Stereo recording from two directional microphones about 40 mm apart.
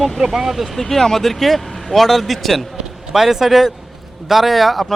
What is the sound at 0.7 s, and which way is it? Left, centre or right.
A man's voice, centre.